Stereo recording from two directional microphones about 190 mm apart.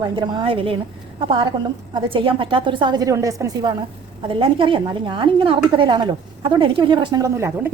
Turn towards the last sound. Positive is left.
turn(degrees=-15)  # may be behind; listen again after turning